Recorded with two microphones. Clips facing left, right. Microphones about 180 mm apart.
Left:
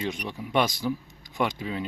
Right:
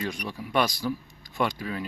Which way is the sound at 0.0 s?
20° left (ahead or behind).